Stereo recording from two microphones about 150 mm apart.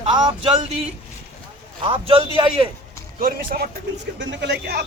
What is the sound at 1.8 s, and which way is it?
Speech, 35° right (ahead or behind).